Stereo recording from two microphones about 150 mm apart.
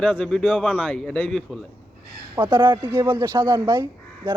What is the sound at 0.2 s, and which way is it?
Speech, 5° left (ahead or behind).